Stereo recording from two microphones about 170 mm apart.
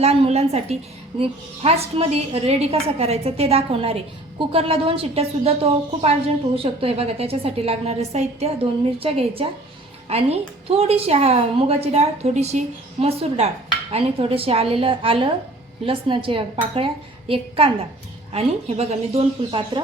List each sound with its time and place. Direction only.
0.0 s a woman's voice: 40° right (ahead or behind)